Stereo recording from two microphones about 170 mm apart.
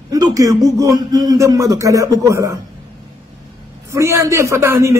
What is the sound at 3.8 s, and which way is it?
Speech, 15° right (ahead or behind).